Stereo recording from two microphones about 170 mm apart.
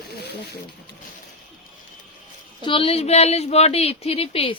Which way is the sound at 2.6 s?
35° left (ahead or behind).